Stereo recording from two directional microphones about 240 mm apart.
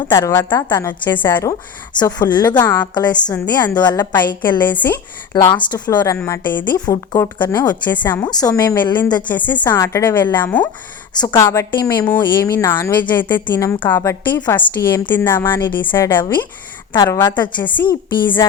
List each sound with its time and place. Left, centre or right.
0.1 s a woman's voice: centre
9.3 s a woman's voice: centre
11.1 s a woman's voice: centre
15.9 s a woman's voice: centre